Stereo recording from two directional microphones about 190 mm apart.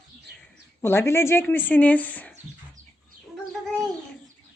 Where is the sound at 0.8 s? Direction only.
15° left (ahead or behind).